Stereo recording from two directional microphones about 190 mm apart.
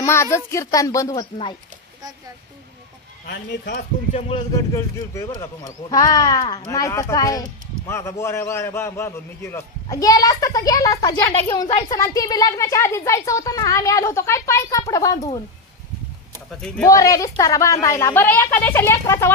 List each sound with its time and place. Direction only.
0.0 s speech: 15° left (ahead or behind)
3.3 s speech: 65° left (ahead or behind)
3.7 s a man's voice: 30° left (ahead or behind)
16.8 s speech: 15° left (ahead or behind)